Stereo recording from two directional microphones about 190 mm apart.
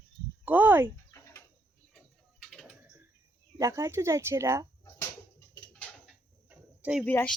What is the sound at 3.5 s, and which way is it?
Speech, 15° right (ahead or behind).